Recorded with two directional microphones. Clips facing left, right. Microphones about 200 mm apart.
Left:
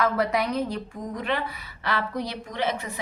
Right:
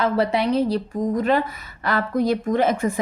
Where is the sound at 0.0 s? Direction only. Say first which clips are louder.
Right 4 dB; 30° right (ahead or behind).